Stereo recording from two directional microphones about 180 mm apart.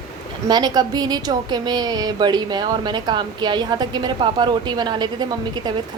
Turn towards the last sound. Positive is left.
turn(degrees=-25)  # may be behind; listen again after turning